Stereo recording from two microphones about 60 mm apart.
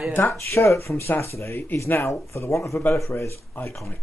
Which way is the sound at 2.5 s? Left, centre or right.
Left.